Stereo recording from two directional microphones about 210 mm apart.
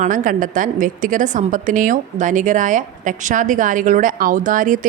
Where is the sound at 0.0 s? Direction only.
40° right (ahead or behind).